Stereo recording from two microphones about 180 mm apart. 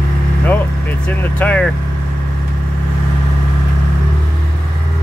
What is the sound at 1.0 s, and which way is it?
Speech, 10° left (ahead or behind).